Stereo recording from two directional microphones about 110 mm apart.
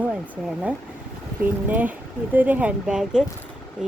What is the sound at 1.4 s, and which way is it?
Speech, 15° right (ahead or behind).